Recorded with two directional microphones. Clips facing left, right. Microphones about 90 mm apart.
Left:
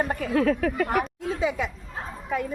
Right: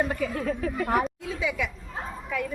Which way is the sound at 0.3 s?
75° left (ahead or behind).